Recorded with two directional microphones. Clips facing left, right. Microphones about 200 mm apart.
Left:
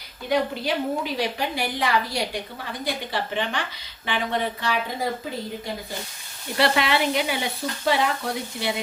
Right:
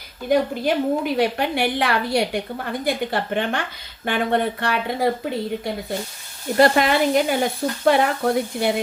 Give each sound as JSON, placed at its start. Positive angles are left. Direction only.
{"t": 0.3, "sound": "a woman's voice", "side_deg": -55}
{"t": 6.6, "sound": "stir", "side_deg": -45}